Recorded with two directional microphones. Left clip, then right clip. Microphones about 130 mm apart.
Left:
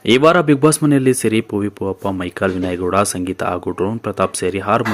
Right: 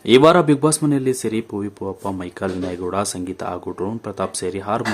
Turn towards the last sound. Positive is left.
turn(degrees=20)  # may be behind; listen again after turning